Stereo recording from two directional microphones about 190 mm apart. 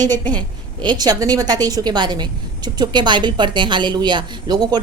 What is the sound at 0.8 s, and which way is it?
A woman's voice, 20° right (ahead or behind).